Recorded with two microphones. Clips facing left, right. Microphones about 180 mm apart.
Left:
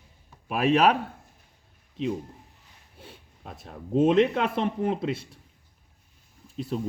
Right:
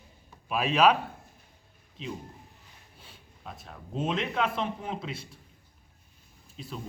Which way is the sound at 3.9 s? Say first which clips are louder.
Left 11 dB; 55° left (ahead or behind).